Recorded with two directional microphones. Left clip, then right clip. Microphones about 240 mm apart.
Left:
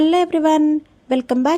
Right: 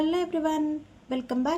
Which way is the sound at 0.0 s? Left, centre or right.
Left.